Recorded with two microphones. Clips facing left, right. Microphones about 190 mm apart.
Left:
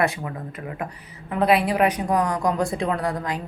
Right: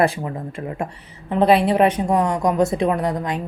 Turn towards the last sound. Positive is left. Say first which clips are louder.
# right 4 dB
turn(degrees=-20)  # may be behind; listen again after turning